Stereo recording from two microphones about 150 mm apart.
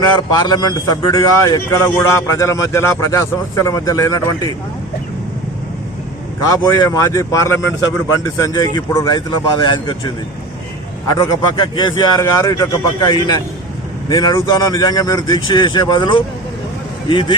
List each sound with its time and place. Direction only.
0.3 s a man's voice: 30° left (ahead or behind)
6.5 s a man's voice: 25° left (ahead or behind)
11.1 s a man's voice: 25° left (ahead or behind)